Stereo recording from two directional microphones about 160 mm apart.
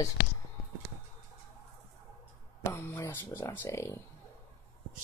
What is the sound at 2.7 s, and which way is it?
Speech, 15° left (ahead or behind).